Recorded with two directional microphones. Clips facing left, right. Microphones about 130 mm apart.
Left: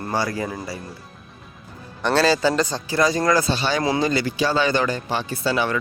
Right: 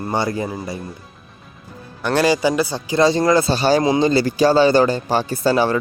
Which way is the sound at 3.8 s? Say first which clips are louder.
Right 5 dB; 30° right (ahead or behind).